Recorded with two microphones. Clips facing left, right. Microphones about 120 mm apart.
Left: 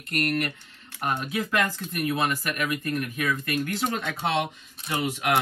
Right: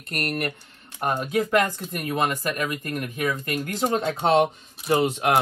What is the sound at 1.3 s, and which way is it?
Speech, 30° right (ahead or behind).